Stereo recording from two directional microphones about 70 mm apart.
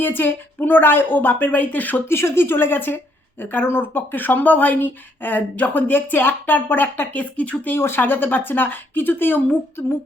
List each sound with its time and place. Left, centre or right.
0.0 s a woman's voice: left
2.1 s a woman's voice: left
7.8 s a woman's voice: left